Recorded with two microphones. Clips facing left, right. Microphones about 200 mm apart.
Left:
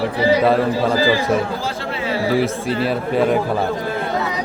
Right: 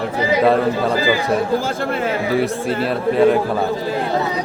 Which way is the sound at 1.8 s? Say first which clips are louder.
Right 4 dB; 50° right (ahead or behind).